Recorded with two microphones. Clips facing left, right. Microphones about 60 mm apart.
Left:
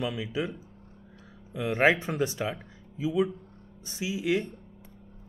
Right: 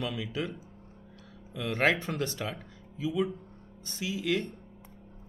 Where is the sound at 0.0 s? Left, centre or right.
Centre.